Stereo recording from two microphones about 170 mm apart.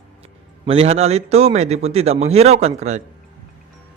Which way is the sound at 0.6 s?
35° right (ahead or behind).